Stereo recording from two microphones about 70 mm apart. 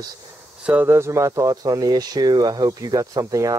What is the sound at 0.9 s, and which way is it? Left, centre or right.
Speech, right.